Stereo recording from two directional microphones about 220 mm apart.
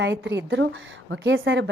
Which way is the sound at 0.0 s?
55° right (ahead or behind).